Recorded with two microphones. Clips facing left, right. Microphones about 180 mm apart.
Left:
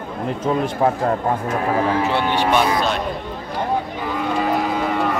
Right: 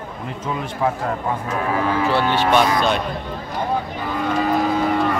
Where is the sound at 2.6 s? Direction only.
Centre (ahead or behind).